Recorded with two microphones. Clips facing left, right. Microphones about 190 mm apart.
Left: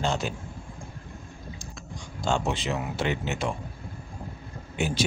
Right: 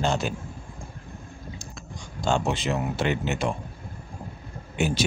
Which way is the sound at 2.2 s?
50° right (ahead or behind).